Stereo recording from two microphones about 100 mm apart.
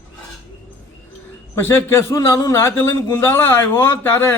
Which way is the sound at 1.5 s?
25° left (ahead or behind).